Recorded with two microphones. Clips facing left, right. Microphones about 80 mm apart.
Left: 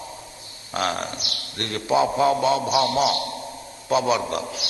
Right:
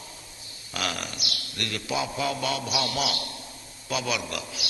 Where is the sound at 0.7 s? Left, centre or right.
Left.